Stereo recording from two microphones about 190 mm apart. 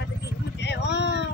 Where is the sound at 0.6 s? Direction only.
65° left (ahead or behind).